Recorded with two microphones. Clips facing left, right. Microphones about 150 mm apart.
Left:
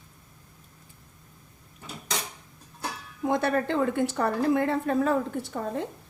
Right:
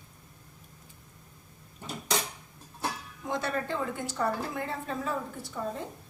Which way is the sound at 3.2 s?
55° left (ahead or behind).